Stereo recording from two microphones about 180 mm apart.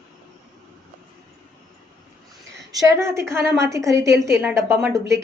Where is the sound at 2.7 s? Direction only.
15° right (ahead or behind).